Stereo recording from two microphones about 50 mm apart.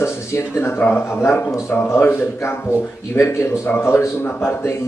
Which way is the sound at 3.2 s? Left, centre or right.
Left.